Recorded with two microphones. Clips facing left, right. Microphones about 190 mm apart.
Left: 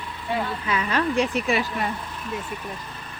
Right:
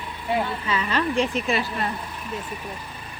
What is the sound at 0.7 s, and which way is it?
Speech, 10° left (ahead or behind).